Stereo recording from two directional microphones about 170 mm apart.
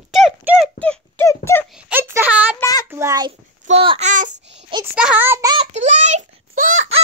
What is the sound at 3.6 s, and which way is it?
Speech, 35° right (ahead or behind).